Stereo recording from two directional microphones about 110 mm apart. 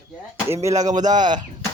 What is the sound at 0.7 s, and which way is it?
Speech, 90° right.